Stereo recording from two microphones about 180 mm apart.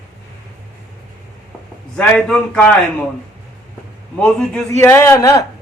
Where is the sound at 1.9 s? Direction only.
5° left (ahead or behind).